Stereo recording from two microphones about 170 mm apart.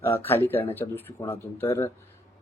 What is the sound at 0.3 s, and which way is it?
Speech, 10° left (ahead or behind).